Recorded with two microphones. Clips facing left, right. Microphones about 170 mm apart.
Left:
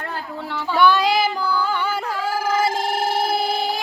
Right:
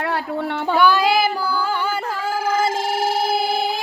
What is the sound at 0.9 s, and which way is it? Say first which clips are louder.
Child singing: left 1 dB; 10° right (ahead or behind).